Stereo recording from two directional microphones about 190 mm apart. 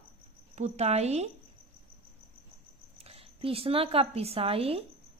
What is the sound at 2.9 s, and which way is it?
A woman's voice, 30° right (ahead or behind).